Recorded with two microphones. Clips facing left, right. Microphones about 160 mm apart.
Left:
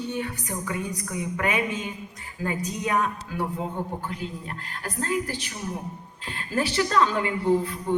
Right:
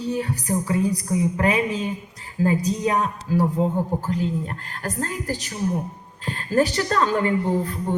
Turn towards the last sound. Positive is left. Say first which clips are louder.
# right 1 dB
turn(degrees=-45)  # may be behind; listen again after turning